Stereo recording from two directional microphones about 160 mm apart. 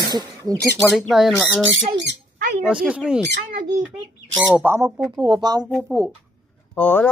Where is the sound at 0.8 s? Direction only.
Centre (ahead or behind).